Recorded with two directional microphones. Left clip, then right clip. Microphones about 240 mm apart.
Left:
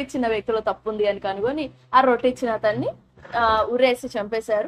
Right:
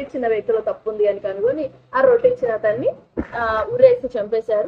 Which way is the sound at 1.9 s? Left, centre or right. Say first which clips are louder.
Right 2 dB; centre.